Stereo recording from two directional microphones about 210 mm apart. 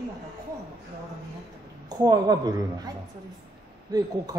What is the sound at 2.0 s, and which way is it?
Speech, 20° right (ahead or behind).